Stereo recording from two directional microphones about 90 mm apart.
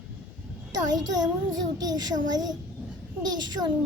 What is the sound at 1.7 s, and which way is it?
Speech, 45° right (ahead or behind).